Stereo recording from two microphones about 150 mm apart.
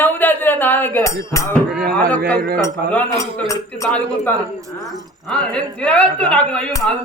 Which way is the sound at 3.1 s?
20° left (ahead or behind).